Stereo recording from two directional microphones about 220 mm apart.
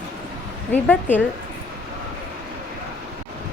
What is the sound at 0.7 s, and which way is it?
Speech, 10° left (ahead or behind).